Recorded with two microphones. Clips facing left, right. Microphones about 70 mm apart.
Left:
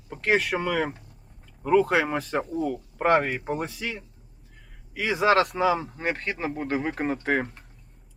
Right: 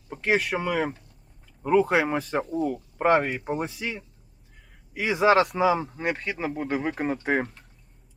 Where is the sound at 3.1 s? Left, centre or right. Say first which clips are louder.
Even; centre.